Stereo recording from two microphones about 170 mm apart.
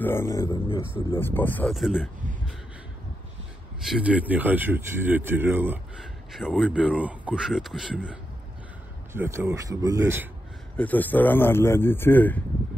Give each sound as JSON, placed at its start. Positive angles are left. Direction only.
{"t": 0.0, "sound": "speech", "side_deg": 15}
{"t": 1.8, "sound": "a man's voice", "side_deg": -5}
{"t": 3.8, "sound": "a man's voice", "side_deg": -5}
{"t": 10.8, "sound": "speech", "side_deg": 10}